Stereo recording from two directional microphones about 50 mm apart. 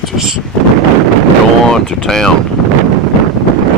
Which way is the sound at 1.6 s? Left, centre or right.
Centre.